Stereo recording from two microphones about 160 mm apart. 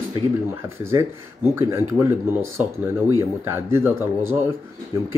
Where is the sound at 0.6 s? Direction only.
15° right (ahead or behind).